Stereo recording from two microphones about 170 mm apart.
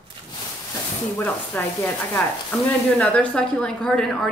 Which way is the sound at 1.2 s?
10° left (ahead or behind).